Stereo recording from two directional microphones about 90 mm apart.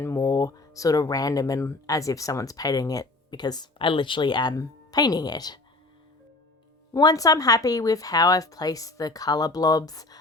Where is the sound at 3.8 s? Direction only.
65° left (ahead or behind); by 5.5 s 50° left (ahead or behind).